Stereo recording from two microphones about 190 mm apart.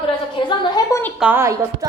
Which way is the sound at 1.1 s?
10° right (ahead or behind).